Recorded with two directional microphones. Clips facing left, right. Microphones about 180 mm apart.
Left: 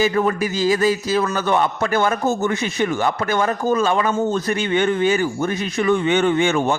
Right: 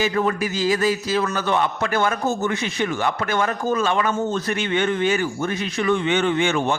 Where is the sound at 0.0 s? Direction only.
40° left (ahead or behind).